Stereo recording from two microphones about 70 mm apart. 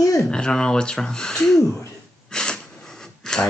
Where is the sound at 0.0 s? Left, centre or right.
Left.